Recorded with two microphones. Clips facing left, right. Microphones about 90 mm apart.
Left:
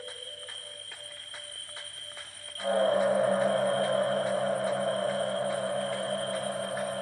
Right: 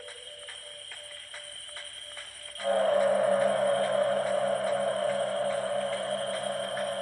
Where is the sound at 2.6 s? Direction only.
10° left (ahead or behind).